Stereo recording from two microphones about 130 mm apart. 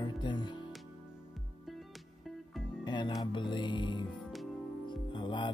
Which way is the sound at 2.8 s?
35° left (ahead or behind).